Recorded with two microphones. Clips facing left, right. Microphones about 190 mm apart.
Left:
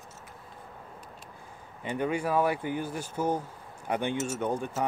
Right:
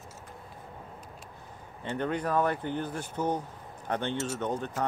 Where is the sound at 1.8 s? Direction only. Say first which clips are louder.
Left 1 dB; 10° left (ahead or behind).